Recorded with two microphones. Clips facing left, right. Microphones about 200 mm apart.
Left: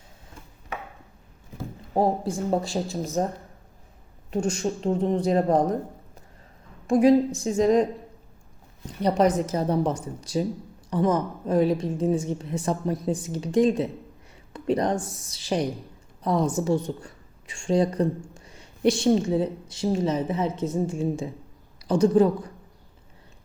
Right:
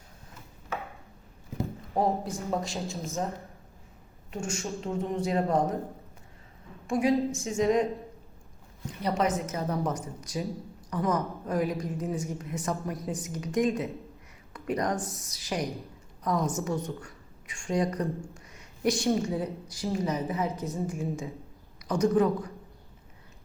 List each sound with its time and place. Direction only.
1.9 s speech: 30° left (ahead or behind)
4.3 s speech: 35° left (ahead or behind)
6.8 s speech: 35° left (ahead or behind)
9.0 s a woman's voice: 35° left (ahead or behind)